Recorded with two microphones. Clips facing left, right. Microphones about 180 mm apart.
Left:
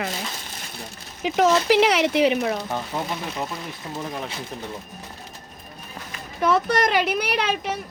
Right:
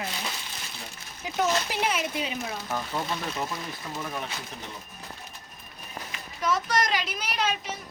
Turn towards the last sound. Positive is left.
turn(degrees=65)  # may be behind; listen again after turning